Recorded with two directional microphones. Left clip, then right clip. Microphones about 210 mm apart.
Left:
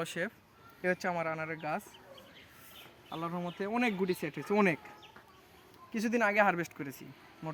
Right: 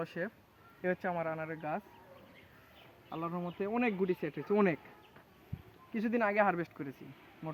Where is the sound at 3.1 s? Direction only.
20° left (ahead or behind).